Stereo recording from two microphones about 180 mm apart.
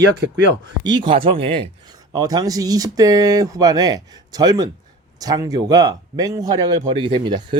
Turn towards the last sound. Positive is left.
turn(degrees=-25)  # may be behind; listen again after turning